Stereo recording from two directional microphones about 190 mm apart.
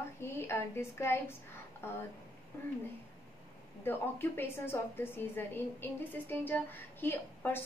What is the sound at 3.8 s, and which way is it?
A woman's voice, 10° left (ahead or behind).